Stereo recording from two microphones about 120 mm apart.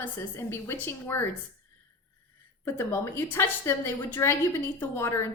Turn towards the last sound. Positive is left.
turn(degrees=20)  # may be behind; listen again after turning